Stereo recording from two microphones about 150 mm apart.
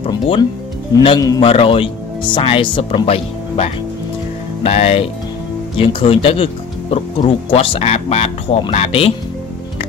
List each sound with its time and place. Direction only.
1.0 s speech: 25° left (ahead or behind)
1.4 s speech: 35° left (ahead or behind)